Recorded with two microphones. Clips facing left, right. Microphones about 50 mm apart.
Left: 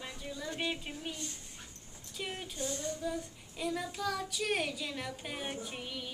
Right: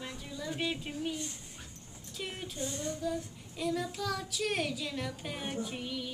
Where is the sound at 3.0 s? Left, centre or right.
Centre.